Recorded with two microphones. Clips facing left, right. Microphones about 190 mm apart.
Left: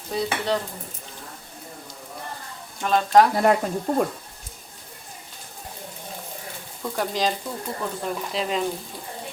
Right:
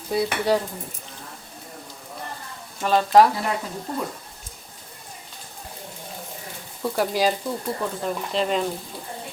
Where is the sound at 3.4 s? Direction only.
55° left (ahead or behind).